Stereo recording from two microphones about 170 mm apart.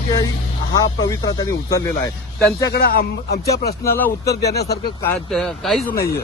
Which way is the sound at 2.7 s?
65° left (ahead or behind).